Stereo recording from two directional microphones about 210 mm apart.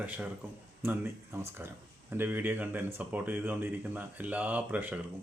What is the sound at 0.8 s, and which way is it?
Speech, 10° right (ahead or behind).